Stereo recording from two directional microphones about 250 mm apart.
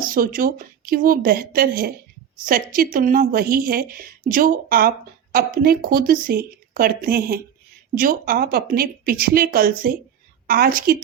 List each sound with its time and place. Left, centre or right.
0.0 s speech: right